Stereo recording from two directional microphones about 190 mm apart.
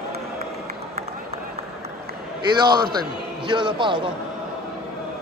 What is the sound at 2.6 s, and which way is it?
A man's voice, 20° right (ahead or behind).